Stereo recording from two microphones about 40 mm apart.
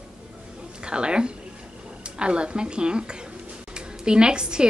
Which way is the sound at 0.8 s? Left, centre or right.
Right.